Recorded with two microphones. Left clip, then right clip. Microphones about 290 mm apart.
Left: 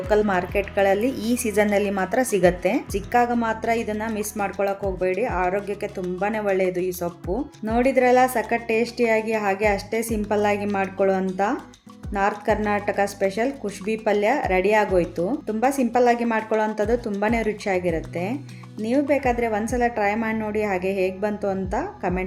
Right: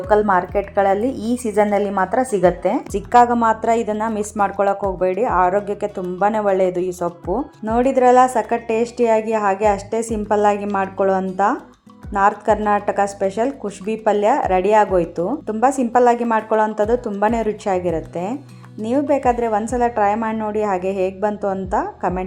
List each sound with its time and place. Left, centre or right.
0.1 s a woman's voice: centre